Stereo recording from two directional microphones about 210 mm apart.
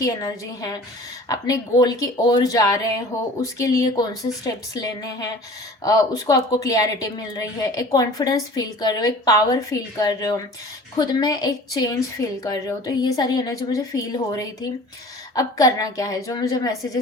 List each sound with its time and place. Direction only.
0.0 s a woman's voice: 15° left (ahead or behind)